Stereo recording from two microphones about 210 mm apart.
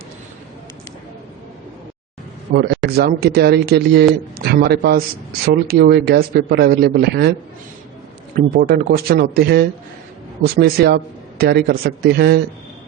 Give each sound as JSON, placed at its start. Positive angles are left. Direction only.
{"t": 2.5, "sound": "a man's voice", "side_deg": -50}
{"t": 8.4, "sound": "a man's voice", "side_deg": -45}